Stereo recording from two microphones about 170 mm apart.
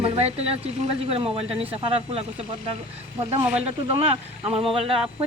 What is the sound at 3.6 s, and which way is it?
Speech, 35° right (ahead or behind).